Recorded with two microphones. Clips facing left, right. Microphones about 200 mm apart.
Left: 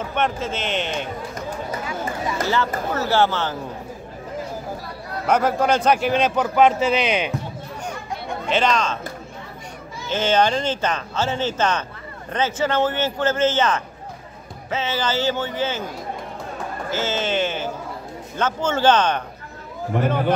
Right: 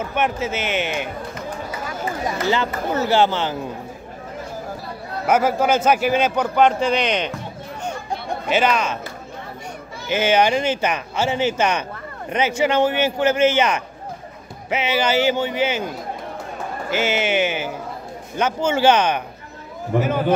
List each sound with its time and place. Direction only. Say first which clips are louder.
0.1 s speech: right 1 dB; 5° right (ahead or behind)
2.5 s speech: right 1 dB; 20° right (ahead or behind)
5.2 s a man's voice: right 1 dB; 5° right (ahead or behind)
8.5 s speech: right 1 dB; 5° right (ahead or behind)
10.0 s speech: right 2 dB; 10° right (ahead or behind)
16.9 s a man's voice: right 3 dB; 15° right (ahead or behind)